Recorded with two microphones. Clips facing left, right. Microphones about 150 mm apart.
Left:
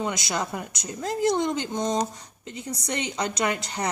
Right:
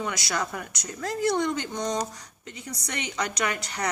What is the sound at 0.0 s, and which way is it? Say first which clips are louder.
A woman's voice: left 2 dB; 20° left (ahead or behind).